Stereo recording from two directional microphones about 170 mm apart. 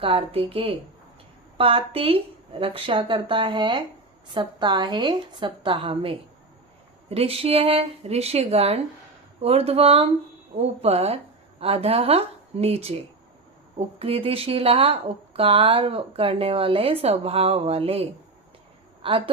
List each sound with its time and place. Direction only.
0.0 s a woman's voice: 30° right (ahead or behind)